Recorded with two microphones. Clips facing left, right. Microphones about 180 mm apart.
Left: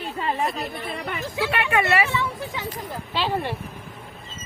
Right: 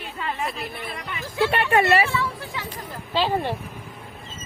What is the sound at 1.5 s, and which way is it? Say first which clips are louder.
Speech: right 3 dB; 30° right (ahead or behind).